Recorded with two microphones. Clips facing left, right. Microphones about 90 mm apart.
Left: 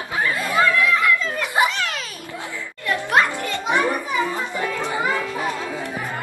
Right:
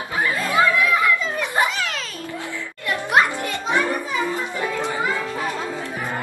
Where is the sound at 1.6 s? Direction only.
Centre (ahead or behind).